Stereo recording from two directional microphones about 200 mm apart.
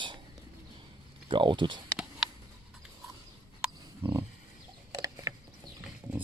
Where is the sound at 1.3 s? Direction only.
25° right (ahead or behind).